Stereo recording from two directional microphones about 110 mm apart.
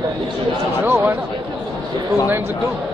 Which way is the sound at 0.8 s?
20° right (ahead or behind).